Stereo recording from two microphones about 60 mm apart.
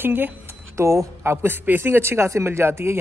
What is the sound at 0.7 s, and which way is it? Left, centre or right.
Speech, right.